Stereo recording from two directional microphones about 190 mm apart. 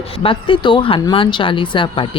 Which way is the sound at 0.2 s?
25° left (ahead or behind).